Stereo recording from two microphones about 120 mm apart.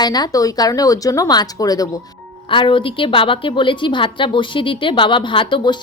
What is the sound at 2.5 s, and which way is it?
A woman's voice, 45° left (ahead or behind).